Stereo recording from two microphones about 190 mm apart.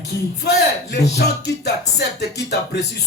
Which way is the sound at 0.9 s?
60° left (ahead or behind).